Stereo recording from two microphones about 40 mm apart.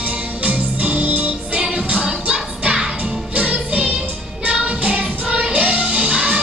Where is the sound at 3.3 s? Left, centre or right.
Right.